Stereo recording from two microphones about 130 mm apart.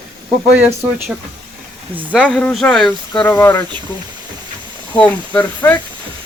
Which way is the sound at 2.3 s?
5° left (ahead or behind).